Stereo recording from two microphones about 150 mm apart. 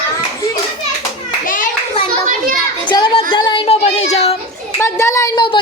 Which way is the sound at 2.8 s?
30° left (ahead or behind).